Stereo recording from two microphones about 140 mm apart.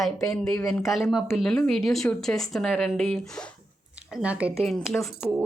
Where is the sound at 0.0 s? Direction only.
5° left (ahead or behind).